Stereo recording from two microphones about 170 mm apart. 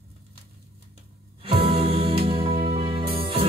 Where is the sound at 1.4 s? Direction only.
30° right (ahead or behind).